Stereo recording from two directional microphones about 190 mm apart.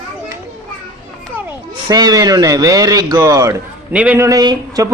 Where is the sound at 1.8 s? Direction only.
20° right (ahead or behind).